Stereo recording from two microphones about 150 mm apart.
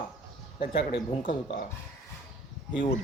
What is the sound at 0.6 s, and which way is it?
Speech, 60° left (ahead or behind).